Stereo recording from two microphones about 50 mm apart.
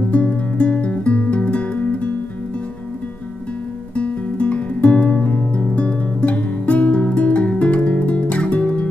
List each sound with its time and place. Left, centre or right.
0.1 s music: left
3.9 s guitar: left
7.2 s music: left